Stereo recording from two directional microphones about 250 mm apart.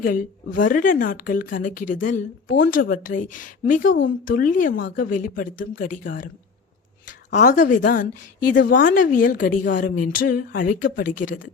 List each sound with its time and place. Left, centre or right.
0.0 s a woman's voice: left
7.3 s a woman's voice: left